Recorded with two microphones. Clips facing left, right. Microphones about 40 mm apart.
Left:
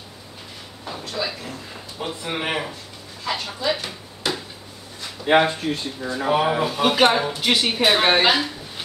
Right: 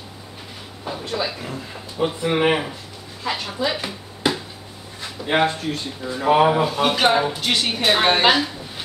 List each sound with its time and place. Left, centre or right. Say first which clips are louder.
0.8 s a man's voice: right 3 dB; centre
3.6 s a sound: even; centre
5.4 s speech: right 1 dB; centre
6.2 s a man's voice: right 5 dB; centre
6.5 s speech: right 1 dB; centre
8.3 s a sound: right 2 dB; centre